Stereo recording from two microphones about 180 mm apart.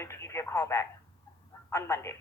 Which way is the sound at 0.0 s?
15° left (ahead or behind).